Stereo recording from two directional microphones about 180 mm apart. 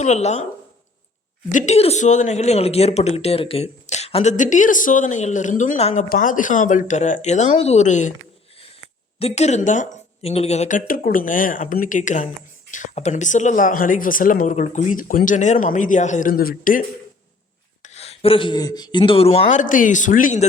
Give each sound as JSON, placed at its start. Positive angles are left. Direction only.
{"t": 0.0, "sound": "speech", "side_deg": 40}
{"t": 1.5, "sound": "speech", "side_deg": 40}
{"t": 9.1, "sound": "speech", "side_deg": 35}
{"t": 17.8, "sound": "speech", "side_deg": 35}